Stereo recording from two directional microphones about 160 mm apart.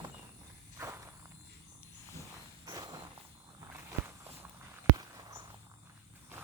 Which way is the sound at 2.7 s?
25° right (ahead or behind).